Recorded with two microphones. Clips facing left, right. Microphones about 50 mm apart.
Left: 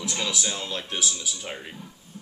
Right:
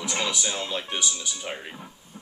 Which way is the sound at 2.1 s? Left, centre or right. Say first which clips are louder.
Left 2 dB; right.